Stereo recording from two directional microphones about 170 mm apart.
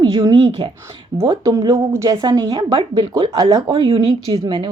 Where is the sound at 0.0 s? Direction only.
25° right (ahead or behind).